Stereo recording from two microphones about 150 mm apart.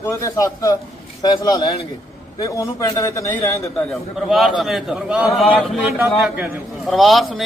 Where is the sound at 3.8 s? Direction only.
Centre (ahead or behind).